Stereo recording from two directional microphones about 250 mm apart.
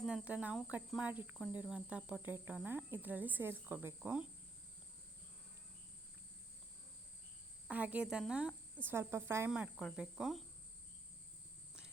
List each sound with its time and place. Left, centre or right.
0.0 s cricket: centre
7.7 s cricket: centre